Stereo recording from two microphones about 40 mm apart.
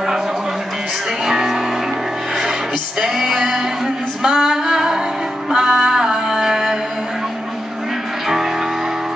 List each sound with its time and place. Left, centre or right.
1.2 s music: centre
3.3 s singing: centre
5.5 s music: right